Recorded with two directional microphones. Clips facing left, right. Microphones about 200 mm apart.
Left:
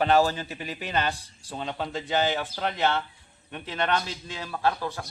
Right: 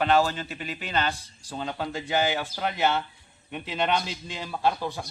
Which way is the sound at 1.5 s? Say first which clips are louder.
Even; centre (ahead or behind).